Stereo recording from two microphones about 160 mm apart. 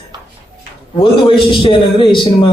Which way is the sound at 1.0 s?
30° left (ahead or behind).